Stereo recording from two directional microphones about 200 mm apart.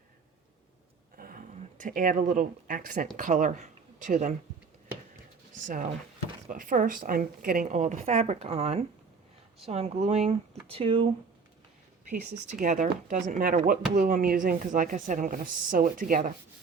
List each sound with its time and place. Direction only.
1.1 s a sound: 45° right (ahead or behind)
1.8 s speech: 40° right (ahead or behind)
5.6 s a woman's voice: 40° right (ahead or behind)
12.5 s a woman's voice: 40° right (ahead or behind)